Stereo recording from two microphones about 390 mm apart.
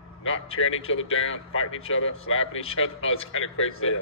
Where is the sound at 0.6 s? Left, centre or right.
Left.